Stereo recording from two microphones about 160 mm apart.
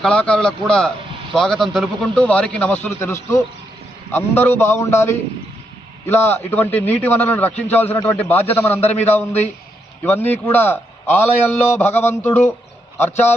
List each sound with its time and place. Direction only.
0.0 s a man's voice: 5° left (ahead or behind)